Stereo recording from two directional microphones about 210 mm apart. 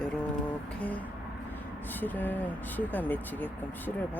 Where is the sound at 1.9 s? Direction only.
10° left (ahead or behind).